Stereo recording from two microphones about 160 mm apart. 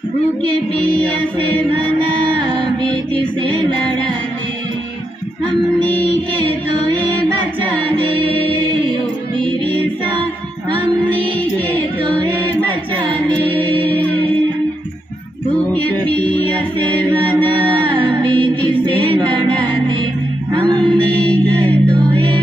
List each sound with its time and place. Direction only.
11.1 s music: 10° left (ahead or behind)
15.7 s music: 10° left (ahead or behind)
18.5 s music: 30° right (ahead or behind)
20.9 s music: 5° left (ahead or behind)